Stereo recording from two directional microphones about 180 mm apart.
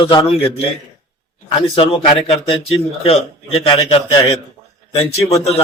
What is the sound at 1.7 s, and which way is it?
A man's voice, 30° left (ahead or behind).